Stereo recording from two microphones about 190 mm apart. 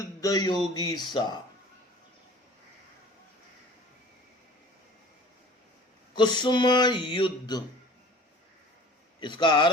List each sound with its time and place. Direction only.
0.0 s speech: 20° left (ahead or behind)
6.1 s speech: 25° left (ahead or behind)
9.2 s speech: 25° left (ahead or behind)